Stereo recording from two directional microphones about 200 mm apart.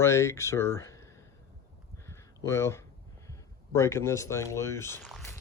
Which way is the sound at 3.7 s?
15° left (ahead or behind).